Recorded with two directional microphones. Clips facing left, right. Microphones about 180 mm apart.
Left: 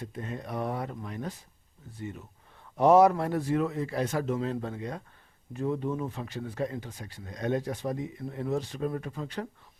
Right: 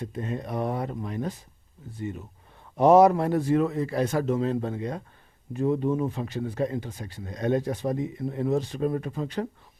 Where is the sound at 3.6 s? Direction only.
40° right (ahead or behind).